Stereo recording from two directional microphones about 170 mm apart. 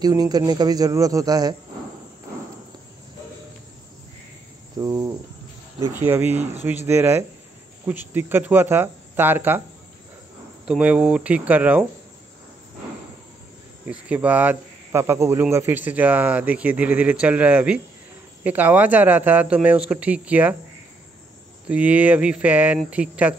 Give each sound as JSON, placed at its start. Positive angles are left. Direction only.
{"t": 0.0, "sound": "speech", "side_deg": -25}
{"t": 4.7, "sound": "speech", "side_deg": -20}
{"t": 10.6, "sound": "speech", "side_deg": -5}
{"t": 14.0, "sound": "speech", "side_deg": -10}
{"t": 21.6, "sound": "speech", "side_deg": -10}